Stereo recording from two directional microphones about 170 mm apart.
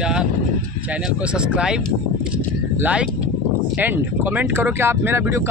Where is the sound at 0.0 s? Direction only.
5° right (ahead or behind).